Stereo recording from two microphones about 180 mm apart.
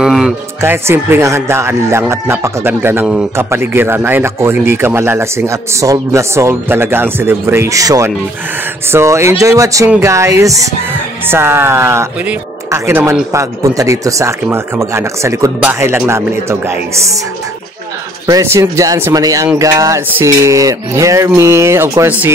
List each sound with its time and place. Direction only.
0.0 s speech: 5° right (ahead or behind)
18.2 s speech: 20° right (ahead or behind)